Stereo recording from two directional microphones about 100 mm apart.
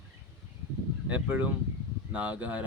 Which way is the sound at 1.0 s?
15° right (ahead or behind).